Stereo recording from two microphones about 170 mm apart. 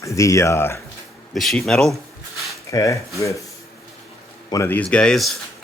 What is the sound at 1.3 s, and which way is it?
Speech, centre (ahead or behind).